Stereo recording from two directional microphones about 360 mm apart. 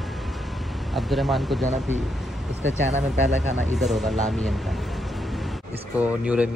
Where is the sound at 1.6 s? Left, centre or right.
Centre.